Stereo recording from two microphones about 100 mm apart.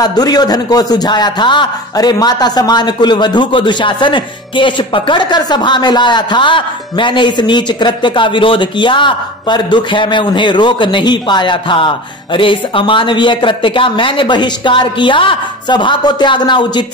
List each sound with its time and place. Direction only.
0.0 s a man's voice: 40° left (ahead or behind)